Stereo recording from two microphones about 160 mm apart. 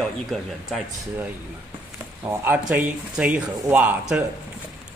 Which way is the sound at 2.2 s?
10° right (ahead or behind).